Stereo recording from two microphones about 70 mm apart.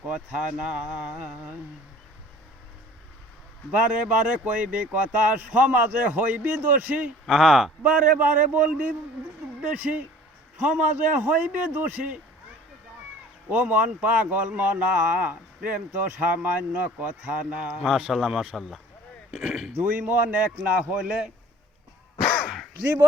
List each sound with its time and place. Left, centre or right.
0.1 s speech: centre
3.7 s speech: centre
7.3 s a man's voice: centre
7.8 s speech: centre
13.5 s speech: right
17.8 s a man's voice: centre
19.7 s speech: right
22.4 s gasp: centre